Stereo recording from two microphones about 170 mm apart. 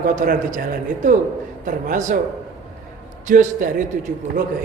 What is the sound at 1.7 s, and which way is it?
Speech, 50° right (ahead or behind).